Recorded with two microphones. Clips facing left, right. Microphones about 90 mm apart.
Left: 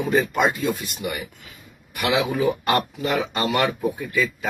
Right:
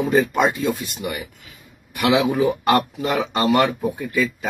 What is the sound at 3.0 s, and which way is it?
Speech, 30° right (ahead or behind).